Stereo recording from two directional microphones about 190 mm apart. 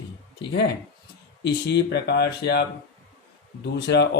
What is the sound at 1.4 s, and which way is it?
Speech, 60° left (ahead or behind).